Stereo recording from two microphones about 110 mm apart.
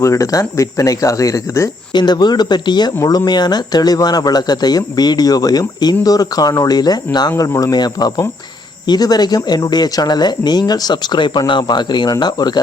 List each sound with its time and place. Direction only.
0.0 s speech: 30° left (ahead or behind)
1.9 s speech: 40° left (ahead or behind)